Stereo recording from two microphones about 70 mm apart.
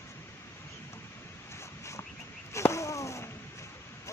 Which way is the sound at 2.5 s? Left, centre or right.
Left.